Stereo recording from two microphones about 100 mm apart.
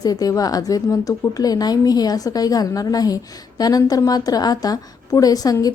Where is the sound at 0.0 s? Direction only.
40° left (ahead or behind).